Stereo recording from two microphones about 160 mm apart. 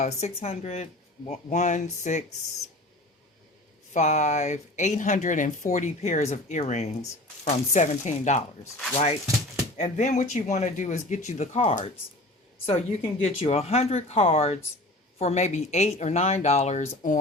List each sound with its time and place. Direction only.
0.0 s speech: 45° left (ahead or behind)
3.9 s speech: 45° left (ahead or behind)
9.7 s speech: 45° left (ahead or behind)